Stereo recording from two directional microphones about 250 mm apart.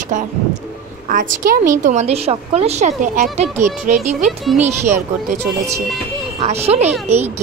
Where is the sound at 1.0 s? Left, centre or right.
Right.